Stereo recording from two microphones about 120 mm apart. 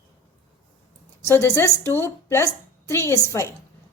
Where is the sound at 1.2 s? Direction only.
20° left (ahead or behind).